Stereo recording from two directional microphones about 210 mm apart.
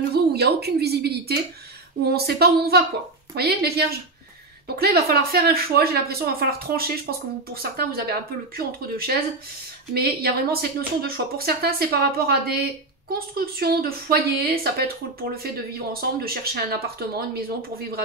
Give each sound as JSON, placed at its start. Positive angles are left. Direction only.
{"t": 0.1, "sound": "a woman's voice", "side_deg": -50}